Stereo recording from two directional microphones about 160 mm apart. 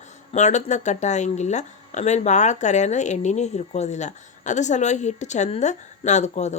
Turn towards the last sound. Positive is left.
turn(degrees=45)  # may be behind; listen again after turning